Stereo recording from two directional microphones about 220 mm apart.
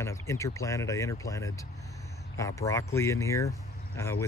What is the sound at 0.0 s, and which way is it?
Speech, 15° left (ahead or behind).